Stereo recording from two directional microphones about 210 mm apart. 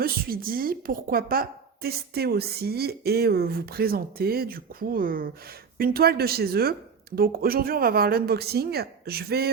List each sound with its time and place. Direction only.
0.0 s a woman's voice: 45° right (ahead or behind)